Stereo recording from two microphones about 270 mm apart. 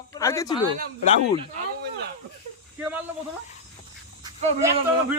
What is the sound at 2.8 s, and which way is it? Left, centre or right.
Speech, centre.